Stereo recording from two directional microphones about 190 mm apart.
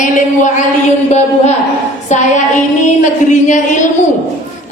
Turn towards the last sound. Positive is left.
turn(degrees=40)  # may be behind; listen again after turning